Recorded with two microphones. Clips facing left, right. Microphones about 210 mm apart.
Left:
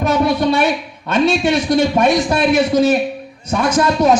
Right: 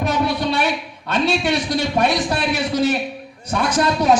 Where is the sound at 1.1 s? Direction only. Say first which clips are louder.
Left 5 dB; 45° left (ahead or behind).